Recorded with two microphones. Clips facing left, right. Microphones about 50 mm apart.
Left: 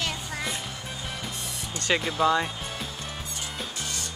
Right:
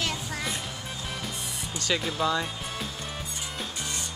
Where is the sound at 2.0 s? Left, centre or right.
Centre.